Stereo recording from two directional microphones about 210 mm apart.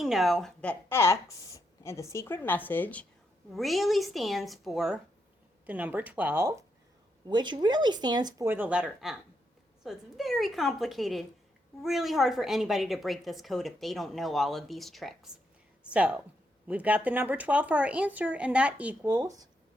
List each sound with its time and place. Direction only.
0.0 s a woman's voice: centre (ahead or behind)